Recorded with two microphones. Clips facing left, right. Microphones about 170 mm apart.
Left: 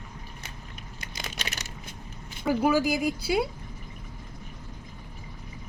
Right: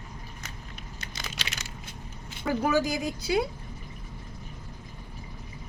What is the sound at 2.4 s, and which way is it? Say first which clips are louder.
Speech: left 2 dB; 10° left (ahead or behind).